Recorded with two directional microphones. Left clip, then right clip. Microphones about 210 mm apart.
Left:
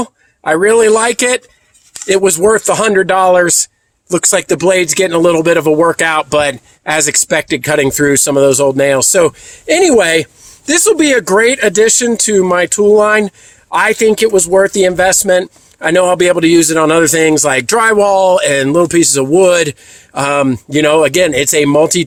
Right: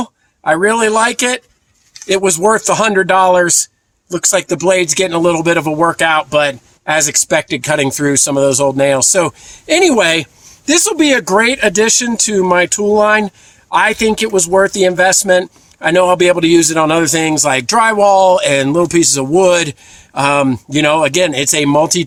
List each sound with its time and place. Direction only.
0.0 s speech: 20° left (ahead or behind)